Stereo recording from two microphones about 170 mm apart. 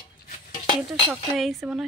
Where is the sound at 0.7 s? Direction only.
Centre (ahead or behind).